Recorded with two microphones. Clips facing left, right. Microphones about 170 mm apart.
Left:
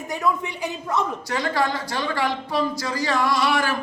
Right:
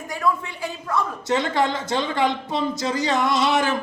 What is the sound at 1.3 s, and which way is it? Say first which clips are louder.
A man's voice: right 4 dB; 20° right (ahead or behind).